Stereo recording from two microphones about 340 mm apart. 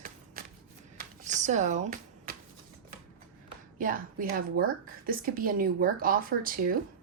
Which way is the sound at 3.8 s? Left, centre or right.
Right.